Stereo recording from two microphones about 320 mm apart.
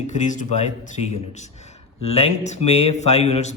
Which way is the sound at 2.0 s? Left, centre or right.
Centre.